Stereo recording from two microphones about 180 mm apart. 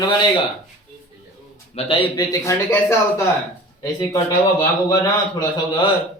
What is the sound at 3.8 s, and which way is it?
Speech, 20° left (ahead or behind).